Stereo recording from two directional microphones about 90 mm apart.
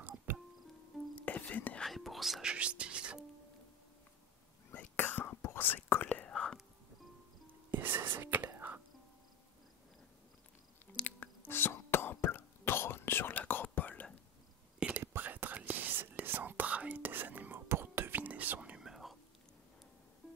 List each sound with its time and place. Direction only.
0.3 s music: 20° right (ahead or behind)
1.2 s whispering: 15° left (ahead or behind)
1.9 s speech: centre (ahead or behind)
2.5 s speech: 15° right (ahead or behind)
4.7 s whispering: 20° left (ahead or behind)
6.3 s whispering: 5° left (ahead or behind)
7.7 s whispering: 20° right (ahead or behind)
8.5 s music: 20° right (ahead or behind)
11.1 s whispering: 20° left (ahead or behind)
14.8 s whispering: 15° right (ahead or behind)